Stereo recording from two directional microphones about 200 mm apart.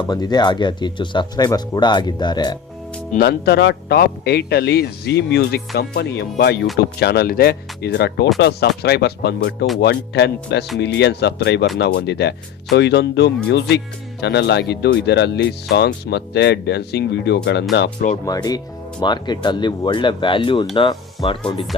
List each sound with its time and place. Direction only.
0.1 s speech: 20° left (ahead or behind)
3.1 s speech: 50° left (ahead or behind)
18.3 s speech: 20° left (ahead or behind)